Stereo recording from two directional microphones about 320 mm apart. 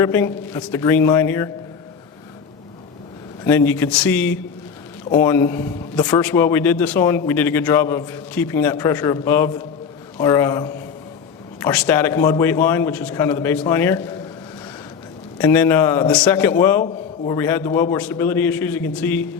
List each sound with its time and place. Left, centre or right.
0.0 s a man's voice: centre
3.4 s a man's voice: centre
15.4 s a man's voice: centre